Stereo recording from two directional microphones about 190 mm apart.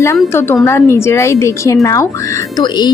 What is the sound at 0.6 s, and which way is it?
Speech, 15° left (ahead or behind).